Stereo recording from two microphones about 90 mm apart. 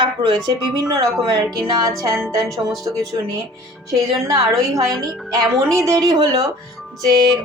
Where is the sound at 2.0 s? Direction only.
35° right (ahead or behind).